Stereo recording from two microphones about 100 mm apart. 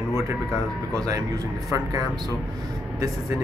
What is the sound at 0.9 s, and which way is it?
Speech, 35° right (ahead or behind).